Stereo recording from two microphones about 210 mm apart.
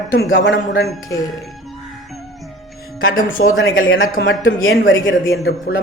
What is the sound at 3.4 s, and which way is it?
Speech, 50° left (ahead or behind).